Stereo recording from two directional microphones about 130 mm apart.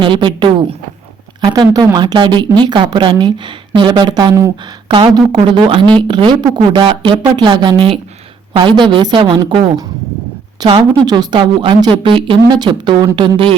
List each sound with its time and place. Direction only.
0.0 s speech: 40° right (ahead or behind)